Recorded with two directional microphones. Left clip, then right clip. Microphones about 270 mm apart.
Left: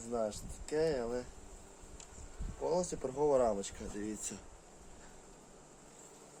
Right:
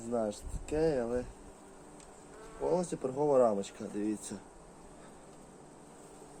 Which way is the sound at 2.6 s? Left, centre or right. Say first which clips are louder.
Right 3 dB; centre.